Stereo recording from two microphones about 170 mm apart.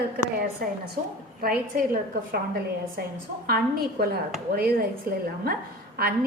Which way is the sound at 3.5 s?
65° right (ahead or behind).